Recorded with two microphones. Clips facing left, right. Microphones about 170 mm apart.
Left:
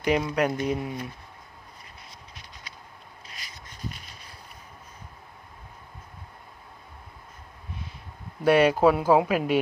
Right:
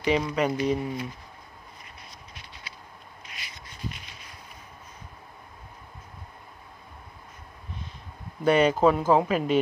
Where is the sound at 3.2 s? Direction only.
40° left (ahead or behind).